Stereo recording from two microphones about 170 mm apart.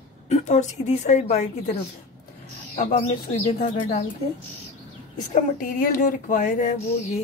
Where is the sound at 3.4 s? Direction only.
45° left (ahead or behind).